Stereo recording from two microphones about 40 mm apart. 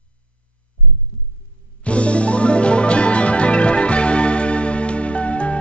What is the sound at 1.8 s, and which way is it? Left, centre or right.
Music, left.